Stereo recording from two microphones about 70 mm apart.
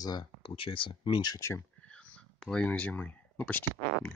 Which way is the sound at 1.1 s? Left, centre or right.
Left.